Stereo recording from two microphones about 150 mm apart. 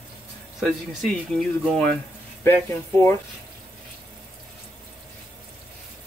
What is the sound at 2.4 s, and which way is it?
Speech, 15° left (ahead or behind).